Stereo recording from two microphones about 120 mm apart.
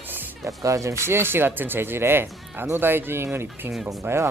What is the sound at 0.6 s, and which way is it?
Speech, 25° right (ahead or behind).